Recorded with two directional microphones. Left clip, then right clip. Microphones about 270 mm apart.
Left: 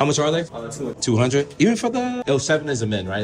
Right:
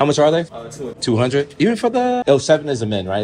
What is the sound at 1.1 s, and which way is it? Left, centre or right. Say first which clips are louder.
Speech: right 3 dB; centre.